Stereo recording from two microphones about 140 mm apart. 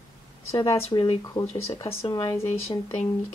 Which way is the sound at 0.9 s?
40° left (ahead or behind).